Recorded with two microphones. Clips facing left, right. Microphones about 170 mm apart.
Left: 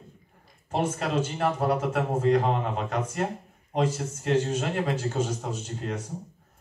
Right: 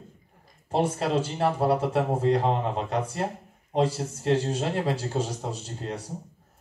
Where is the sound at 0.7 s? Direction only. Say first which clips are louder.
Right 2 dB; 35° right (ahead or behind).